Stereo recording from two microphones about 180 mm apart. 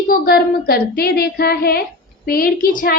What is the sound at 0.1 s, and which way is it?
A woman's voice, 55° left (ahead or behind).